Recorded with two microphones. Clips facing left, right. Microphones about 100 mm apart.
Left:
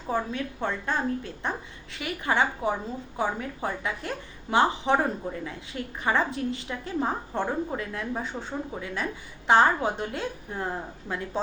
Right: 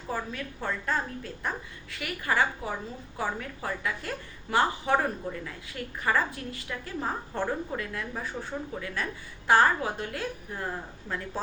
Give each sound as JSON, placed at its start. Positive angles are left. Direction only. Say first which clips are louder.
{"t": 0.1, "sound": "a woman's voice", "louder": "left 5 dB", "side_deg": 25}